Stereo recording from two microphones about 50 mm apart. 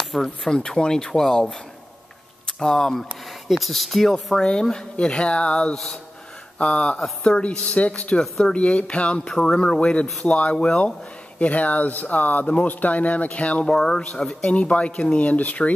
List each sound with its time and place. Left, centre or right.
0.2 s speech: centre
4.1 s speech: centre
8.2 s speech: centre
8.5 s speech: left
13.7 s speech: centre; by 15.7 s left